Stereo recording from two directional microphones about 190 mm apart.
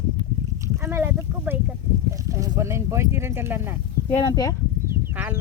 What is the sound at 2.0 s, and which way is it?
Speech, 15° right (ahead or behind).